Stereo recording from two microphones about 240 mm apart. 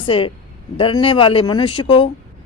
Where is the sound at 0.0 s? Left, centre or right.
Left.